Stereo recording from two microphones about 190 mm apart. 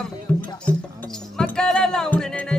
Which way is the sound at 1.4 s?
5° left (ahead or behind).